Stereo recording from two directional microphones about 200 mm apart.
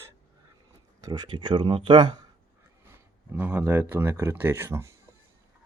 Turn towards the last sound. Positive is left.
turn(degrees=-15)  # may be behind; listen again after turning